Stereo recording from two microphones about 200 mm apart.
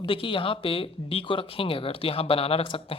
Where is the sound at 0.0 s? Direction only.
25° left (ahead or behind).